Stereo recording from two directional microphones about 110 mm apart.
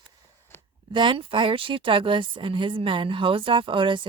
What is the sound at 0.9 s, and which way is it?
A woman's voice, 45° right (ahead or behind).